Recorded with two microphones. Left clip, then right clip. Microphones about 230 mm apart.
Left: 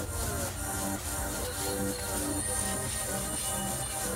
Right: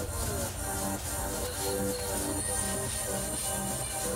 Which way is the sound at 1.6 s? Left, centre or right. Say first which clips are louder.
Right 3 dB; centre.